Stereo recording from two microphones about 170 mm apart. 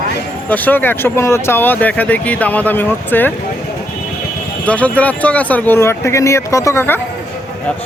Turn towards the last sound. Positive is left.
turn(degrees=15)  # may be behind; listen again after turning